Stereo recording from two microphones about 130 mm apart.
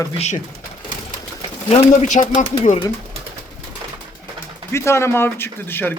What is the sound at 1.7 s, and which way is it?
Speech, 60° left (ahead or behind).